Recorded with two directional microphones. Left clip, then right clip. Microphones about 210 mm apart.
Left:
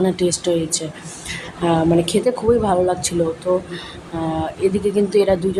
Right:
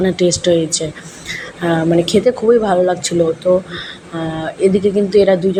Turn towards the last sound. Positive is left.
turn(degrees=-5)  # may be behind; listen again after turning